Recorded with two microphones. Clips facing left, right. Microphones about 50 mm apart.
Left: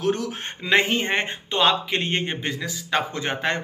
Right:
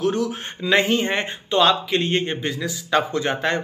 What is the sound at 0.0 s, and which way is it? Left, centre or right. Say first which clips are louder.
Speech: right 2 dB; left.